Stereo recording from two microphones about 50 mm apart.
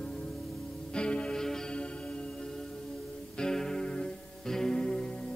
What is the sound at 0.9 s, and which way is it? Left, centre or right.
Music, left.